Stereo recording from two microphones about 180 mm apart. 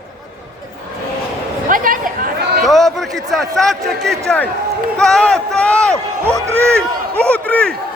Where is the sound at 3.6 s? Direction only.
Centre (ahead or behind).